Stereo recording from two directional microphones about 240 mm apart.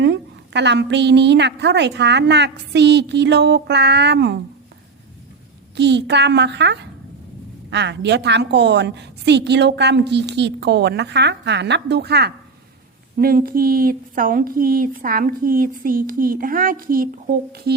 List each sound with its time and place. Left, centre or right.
0.0 s a woman's voice: right
5.7 s a woman's voice: right